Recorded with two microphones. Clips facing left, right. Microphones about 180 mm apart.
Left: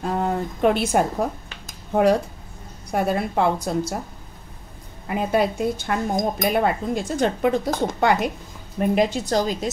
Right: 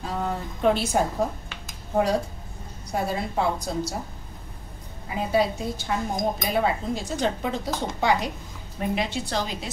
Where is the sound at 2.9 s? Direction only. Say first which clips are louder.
Left 5 dB; 60° left (ahead or behind).